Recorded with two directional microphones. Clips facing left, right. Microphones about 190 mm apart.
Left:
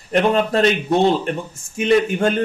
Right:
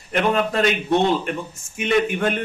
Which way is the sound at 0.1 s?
35° left (ahead or behind).